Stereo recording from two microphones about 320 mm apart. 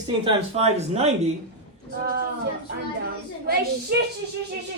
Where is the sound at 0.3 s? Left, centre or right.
Centre.